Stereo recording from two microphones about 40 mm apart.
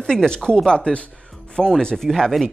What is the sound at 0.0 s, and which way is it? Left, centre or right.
Speech, centre.